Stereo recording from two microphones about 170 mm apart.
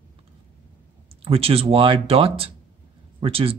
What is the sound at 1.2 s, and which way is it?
Speech, 35° right (ahead or behind).